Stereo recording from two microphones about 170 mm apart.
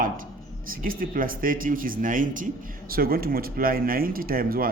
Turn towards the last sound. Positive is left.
turn(degrees=-60)  # may be behind; listen again after turning